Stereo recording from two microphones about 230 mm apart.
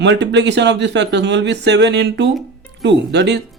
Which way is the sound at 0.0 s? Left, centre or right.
Right.